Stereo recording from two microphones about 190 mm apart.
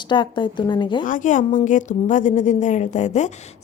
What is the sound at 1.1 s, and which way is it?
A woman's voice, 45° left (ahead or behind).